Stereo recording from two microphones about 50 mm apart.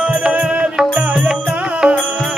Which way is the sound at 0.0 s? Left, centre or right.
Right.